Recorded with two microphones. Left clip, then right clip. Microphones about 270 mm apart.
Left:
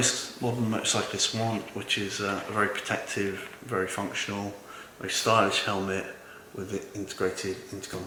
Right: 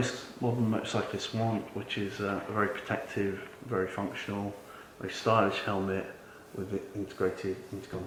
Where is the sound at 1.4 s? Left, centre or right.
Centre.